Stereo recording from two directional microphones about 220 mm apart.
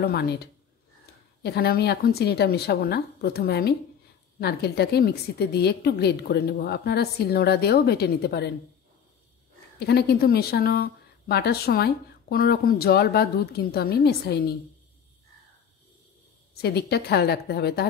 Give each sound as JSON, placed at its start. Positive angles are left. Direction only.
{"t": 0.0, "sound": "a woman's voice", "side_deg": 45}
{"t": 9.8, "sound": "a woman's voice", "side_deg": 45}
{"t": 16.5, "sound": "a woman's voice", "side_deg": 45}